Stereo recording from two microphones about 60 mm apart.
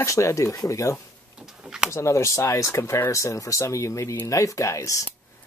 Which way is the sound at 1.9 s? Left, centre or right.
Left.